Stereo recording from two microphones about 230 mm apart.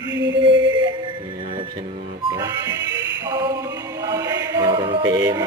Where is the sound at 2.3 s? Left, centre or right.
Centre.